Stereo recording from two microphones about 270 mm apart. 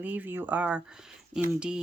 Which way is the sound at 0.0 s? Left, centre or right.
Centre.